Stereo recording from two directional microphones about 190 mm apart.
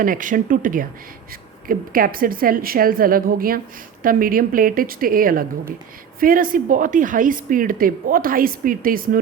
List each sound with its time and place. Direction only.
0.0 s a woman's voice: 45° right (ahead or behind)